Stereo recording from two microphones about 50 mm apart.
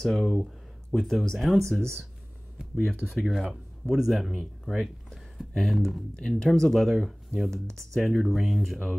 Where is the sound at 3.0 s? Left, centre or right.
Centre.